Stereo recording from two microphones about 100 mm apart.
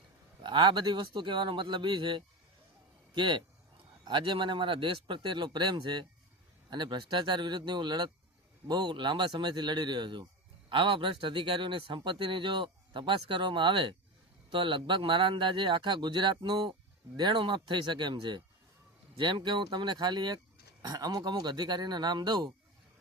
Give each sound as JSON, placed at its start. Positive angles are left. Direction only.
{"t": 0.4, "sound": "speech", "side_deg": -45}